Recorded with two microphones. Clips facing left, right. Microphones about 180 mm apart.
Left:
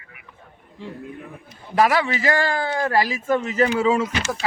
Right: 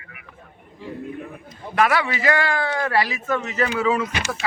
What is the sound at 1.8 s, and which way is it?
Speech, 35° left (ahead or behind).